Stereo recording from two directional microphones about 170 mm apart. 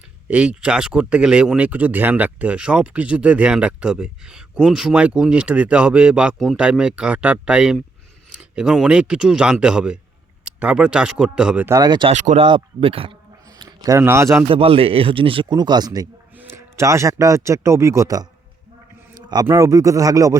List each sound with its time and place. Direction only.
0.3 s speech: 5° right (ahead or behind)
11.8 s speech: 25° right (ahead or behind)
12.1 s speech: 45° right (ahead or behind)
12.5 s speech: 30° right (ahead or behind)
13.5 s a man's voice: 20° right (ahead or behind)
14.4 s speech: 30° right (ahead or behind)
16.3 s speech: 10° right (ahead or behind)
19.5 s speech: 20° right (ahead or behind)